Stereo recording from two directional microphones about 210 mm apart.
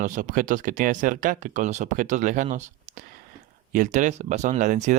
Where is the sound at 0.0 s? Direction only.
40° right (ahead or behind).